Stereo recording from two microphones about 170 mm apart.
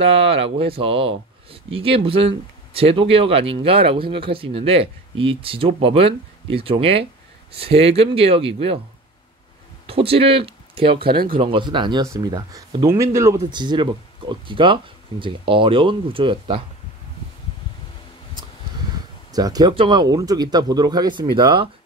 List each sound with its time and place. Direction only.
0.0 s speech: 35° right (ahead or behind)
9.8 s speech: 35° right (ahead or behind); by 13.4 s 15° right (ahead or behind)
13.5 s speech: 25° right (ahead or behind)
19.3 s speech: 20° right (ahead or behind)